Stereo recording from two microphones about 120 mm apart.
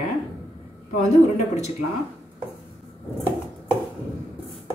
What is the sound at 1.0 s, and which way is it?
Speech, 70° left (ahead or behind).